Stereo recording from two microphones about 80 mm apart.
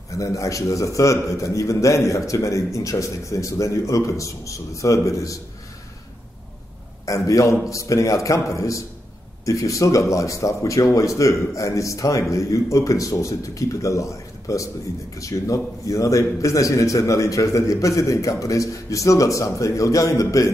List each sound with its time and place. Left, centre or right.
0.1 s a man's voice: left
7.2 s a man's voice: left